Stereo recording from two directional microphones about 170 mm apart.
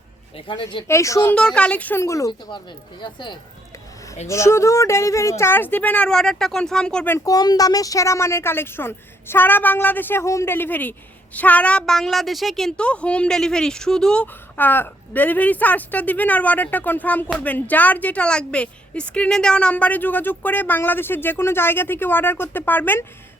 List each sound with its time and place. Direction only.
0.3 s speech: 30° left (ahead or behind)
0.9 s a woman's voice: 15° left (ahead or behind)
4.3 s a woman's voice: 15° left (ahead or behind)
7.3 s a woman's voice: 20° left (ahead or behind)